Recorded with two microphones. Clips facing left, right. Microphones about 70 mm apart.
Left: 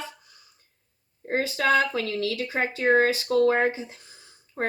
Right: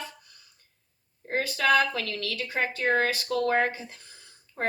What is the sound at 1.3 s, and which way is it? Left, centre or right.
Speech, left.